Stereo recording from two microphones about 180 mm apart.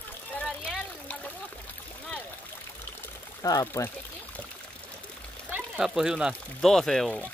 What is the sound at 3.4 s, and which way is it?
Speech, 20° left (ahead or behind).